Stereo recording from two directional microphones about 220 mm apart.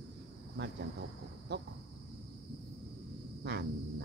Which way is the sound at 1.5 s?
50° right (ahead or behind).